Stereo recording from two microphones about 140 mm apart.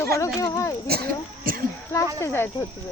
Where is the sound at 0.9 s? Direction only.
90° right.